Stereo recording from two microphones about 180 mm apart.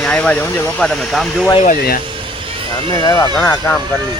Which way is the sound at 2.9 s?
25° left (ahead or behind).